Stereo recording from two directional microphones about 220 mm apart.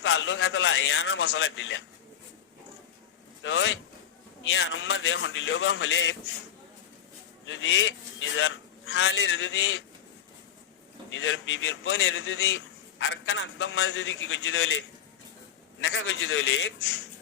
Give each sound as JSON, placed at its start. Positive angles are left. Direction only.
{"t": 0.0, "sound": "a man's voice", "side_deg": 55}
{"t": 3.4, "sound": "a man's voice", "side_deg": 60}
{"t": 7.4, "sound": "a man's voice", "side_deg": 60}
{"t": 11.1, "sound": "a man's voice", "side_deg": 60}